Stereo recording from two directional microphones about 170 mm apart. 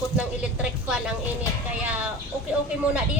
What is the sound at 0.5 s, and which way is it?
Speech, 5° right (ahead or behind).